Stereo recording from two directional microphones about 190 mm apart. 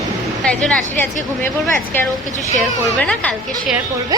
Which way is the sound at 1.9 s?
10° left (ahead or behind).